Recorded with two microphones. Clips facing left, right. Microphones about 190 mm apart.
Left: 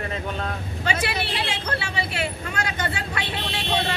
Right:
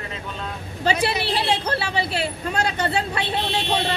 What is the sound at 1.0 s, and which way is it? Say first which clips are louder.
A woman's voice: right 5 dB; 30° right (ahead or behind).